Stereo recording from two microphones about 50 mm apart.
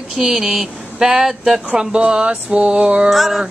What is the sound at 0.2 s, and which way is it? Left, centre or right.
Speech, centre.